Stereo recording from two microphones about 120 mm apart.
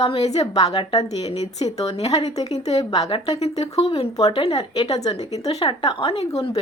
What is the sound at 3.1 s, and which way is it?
Speech, 60° left (ahead or behind).